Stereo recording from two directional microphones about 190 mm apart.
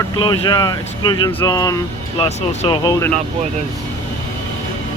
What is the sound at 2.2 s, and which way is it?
Speech, 30° left (ahead or behind).